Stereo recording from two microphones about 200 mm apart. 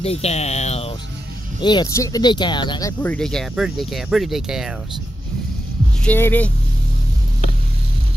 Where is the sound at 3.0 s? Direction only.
5° left (ahead or behind).